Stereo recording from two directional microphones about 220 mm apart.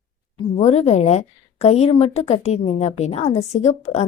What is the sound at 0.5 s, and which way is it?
A woman's voice, 30° left (ahead or behind).